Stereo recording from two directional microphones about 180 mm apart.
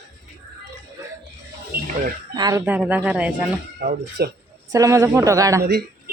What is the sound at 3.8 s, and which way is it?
Speech, 60° right (ahead or behind).